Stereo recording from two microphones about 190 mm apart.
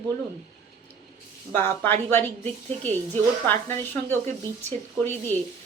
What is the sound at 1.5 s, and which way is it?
Speech, 10° left (ahead or behind).